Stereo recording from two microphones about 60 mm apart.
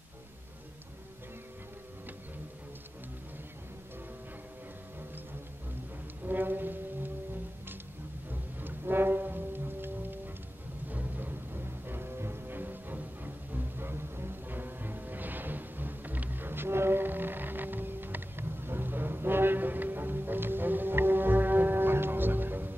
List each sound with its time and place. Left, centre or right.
6.2 s music: right
8.3 s music: right